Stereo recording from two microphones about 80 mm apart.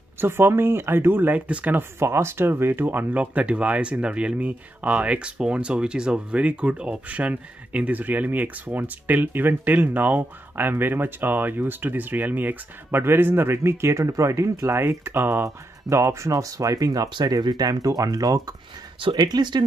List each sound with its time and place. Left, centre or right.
0.2 s speech: right
17.1 s speech: right
18.9 s speech: right